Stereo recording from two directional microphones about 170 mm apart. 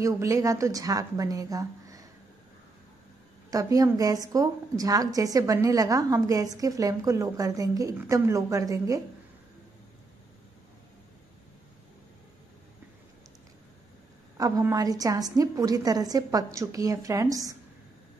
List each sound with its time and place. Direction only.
0.0 s a woman's voice: 20° right (ahead or behind)
3.4 s a woman's voice: 20° right (ahead or behind)
14.3 s a woman's voice: 20° right (ahead or behind)